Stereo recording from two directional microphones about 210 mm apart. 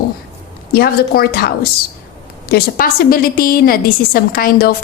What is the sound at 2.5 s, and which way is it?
A woman's voice, 45° left (ahead or behind).